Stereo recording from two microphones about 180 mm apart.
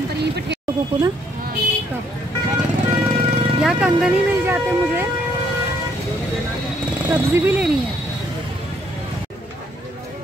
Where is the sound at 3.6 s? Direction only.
5° right (ahead or behind).